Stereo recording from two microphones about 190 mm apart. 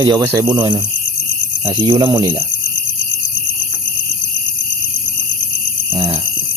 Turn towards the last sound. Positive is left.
turn(degrees=-25)  # may be behind; listen again after turning